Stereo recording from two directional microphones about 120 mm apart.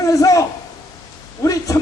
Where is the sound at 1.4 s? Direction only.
30° left (ahead or behind).